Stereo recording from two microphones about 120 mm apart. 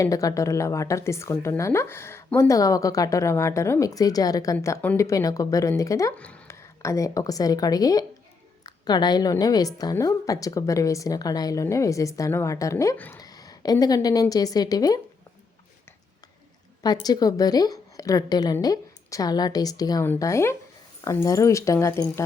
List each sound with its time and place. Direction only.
0.0 s a woman's voice: 30° left (ahead or behind)
16.8 s a woman's voice: 35° left (ahead or behind)